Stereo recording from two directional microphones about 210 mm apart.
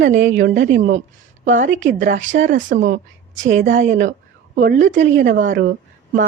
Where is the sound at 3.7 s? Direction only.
60° right (ahead or behind).